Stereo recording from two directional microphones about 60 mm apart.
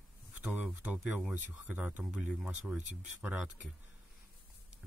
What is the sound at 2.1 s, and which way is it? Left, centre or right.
Speech, centre.